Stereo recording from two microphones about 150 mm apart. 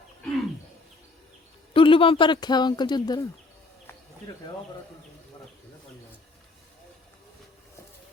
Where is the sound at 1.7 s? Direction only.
35° left (ahead or behind).